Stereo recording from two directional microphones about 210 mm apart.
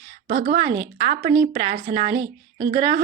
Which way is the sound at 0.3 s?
40° right (ahead or behind).